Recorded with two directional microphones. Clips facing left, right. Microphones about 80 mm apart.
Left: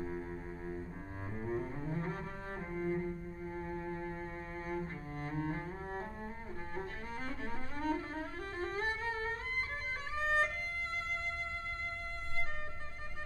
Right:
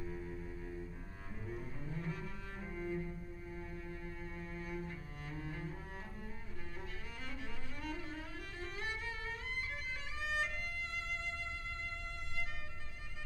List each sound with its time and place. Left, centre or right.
0.0 s double bass: left
2.7 s cello: left
7.8 s music: left
10.1 s violin: left